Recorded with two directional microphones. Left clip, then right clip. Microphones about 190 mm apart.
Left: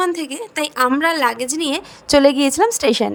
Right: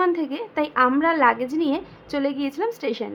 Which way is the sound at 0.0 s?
50° left (ahead or behind).